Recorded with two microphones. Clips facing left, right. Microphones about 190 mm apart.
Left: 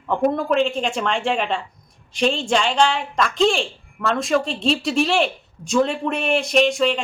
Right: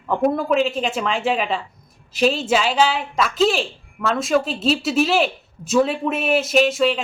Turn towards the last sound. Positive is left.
turn(degrees=-5)  # may be behind; listen again after turning